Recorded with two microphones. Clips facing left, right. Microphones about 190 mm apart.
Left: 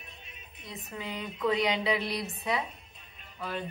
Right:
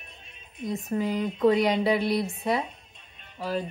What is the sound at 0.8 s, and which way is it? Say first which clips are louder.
Speech: right 10 dB; 40° right (ahead or behind).